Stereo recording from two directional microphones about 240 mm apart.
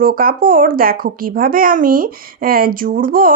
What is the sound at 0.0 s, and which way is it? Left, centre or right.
Speech, right.